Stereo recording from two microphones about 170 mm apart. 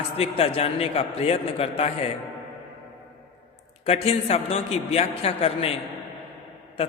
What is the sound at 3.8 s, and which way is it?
A man's voice, 35° left (ahead or behind).